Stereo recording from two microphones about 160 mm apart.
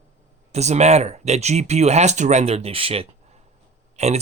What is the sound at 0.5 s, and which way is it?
Speech, 45° right (ahead or behind).